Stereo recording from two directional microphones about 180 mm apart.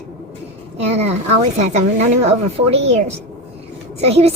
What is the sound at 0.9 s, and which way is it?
A woman's voice, 35° right (ahead or behind).